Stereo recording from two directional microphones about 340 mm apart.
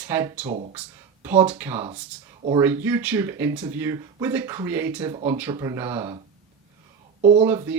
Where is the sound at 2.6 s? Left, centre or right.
Centre.